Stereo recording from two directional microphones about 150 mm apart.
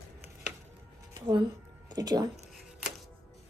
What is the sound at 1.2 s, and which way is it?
Speech, 30° right (ahead or behind).